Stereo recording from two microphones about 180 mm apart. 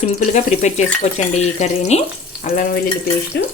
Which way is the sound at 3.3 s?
65° left (ahead or behind).